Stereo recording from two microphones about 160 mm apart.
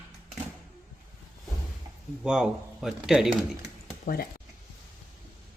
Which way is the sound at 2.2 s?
5° right (ahead or behind).